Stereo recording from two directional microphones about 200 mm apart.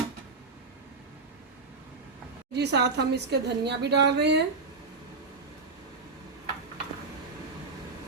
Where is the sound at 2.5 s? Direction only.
55° right (ahead or behind).